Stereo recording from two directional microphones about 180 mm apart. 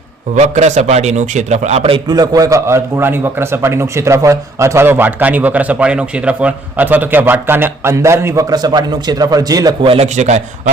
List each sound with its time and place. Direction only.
0.3 s a man's voice: 40° right (ahead or behind)